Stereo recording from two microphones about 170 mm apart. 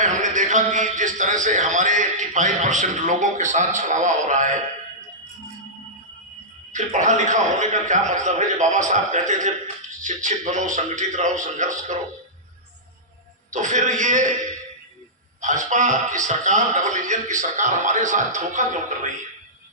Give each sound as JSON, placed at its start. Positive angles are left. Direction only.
{"t": 0.0, "sound": "a man's voice", "side_deg": -45}
{"t": 6.7, "sound": "a man's voice", "side_deg": -45}
{"t": 13.5, "sound": "a man's voice", "side_deg": -45}
{"t": 15.4, "sound": "a man's voice", "side_deg": -45}